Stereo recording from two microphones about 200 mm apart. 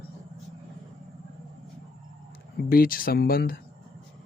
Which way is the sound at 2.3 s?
45° left (ahead or behind).